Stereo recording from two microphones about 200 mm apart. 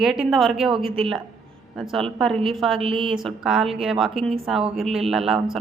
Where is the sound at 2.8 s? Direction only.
25° right (ahead or behind).